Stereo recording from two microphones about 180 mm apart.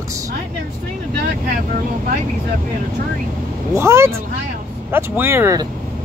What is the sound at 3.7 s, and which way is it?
Speech, 15° right (ahead or behind).